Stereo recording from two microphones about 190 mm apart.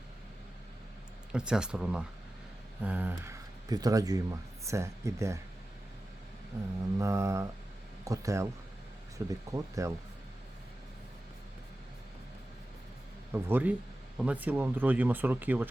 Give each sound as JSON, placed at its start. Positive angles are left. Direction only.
{"t": 1.3, "sound": "speech", "side_deg": -5}
{"t": 7.0, "sound": "speech", "side_deg": -15}
{"t": 13.3, "sound": "speech", "side_deg": -10}